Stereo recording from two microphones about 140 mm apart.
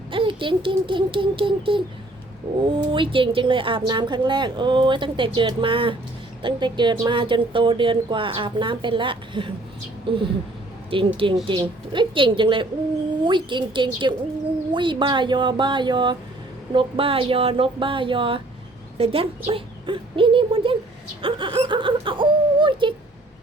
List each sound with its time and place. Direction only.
0.1 s a woman's voice: 35° right (ahead or behind)